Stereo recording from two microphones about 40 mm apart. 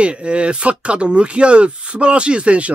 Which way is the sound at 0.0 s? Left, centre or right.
Right.